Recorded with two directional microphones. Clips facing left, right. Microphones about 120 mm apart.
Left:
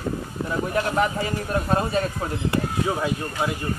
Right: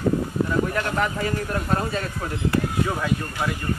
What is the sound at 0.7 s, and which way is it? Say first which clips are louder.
A man's voice: left 2 dB; 25° left (ahead or behind).